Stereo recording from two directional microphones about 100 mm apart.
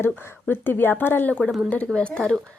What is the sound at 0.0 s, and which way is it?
Speech, 20° left (ahead or behind).